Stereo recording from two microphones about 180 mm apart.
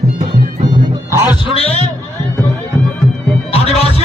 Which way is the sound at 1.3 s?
30° left (ahead or behind).